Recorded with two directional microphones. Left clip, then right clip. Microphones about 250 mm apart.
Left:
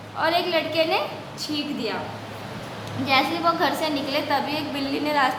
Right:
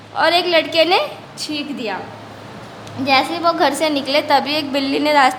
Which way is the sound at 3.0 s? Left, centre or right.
Right.